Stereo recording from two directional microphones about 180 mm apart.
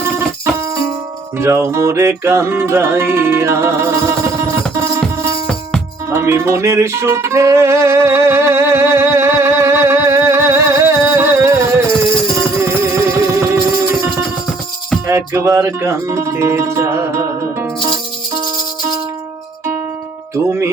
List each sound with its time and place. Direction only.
1.4 s music: 15° right (ahead or behind)
6.1 s music: 15° right (ahead or behind)
15.0 s music: 15° right (ahead or behind)
20.3 s music: 15° right (ahead or behind)